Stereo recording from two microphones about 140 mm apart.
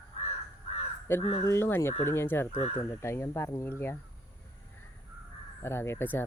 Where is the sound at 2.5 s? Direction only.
50° left (ahead or behind).